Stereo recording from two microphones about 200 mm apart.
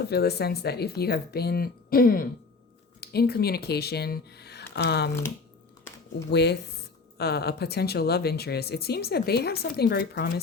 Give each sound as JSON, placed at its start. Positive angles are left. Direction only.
{"t": 0.0, "sound": "speech", "side_deg": 55}
{"t": 6.3, "sound": "speech", "side_deg": 55}